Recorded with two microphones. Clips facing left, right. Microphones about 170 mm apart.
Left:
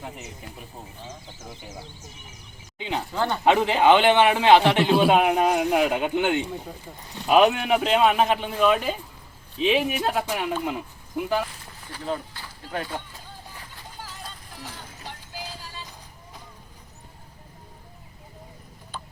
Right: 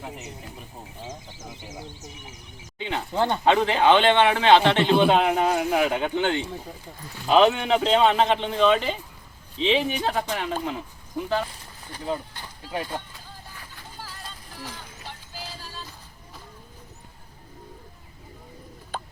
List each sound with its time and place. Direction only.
2.7 s speech: 15° left (ahead or behind)
3.1 s speech: 25° right (ahead or behind)
3.4 s a man's voice: 15° left (ahead or behind)
11.9 s speech: 15° right (ahead or behind)
15.0 s music: 15° left (ahead or behind)